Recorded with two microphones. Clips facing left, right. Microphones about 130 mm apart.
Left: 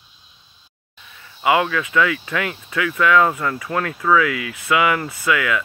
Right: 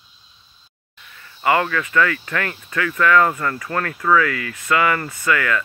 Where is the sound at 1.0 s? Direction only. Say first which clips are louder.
Left 1 dB; 5° left (ahead or behind).